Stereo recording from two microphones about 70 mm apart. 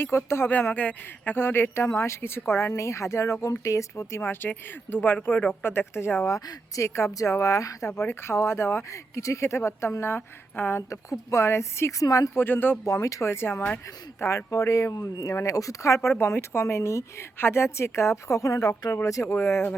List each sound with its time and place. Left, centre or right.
0.0 s speech: left
0.5 s speech: left
4.2 s speech: left
6.3 s speech: left
7.9 s speech: left
10.8 s speech: left
12.0 s speech: left
12.3 s speech: left
12.8 s speech: left